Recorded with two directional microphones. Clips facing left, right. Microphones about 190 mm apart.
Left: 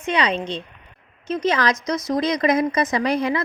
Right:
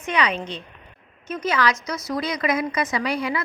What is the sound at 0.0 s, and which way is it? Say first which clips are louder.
Speech: left 2 dB; 30° left (ahead or behind).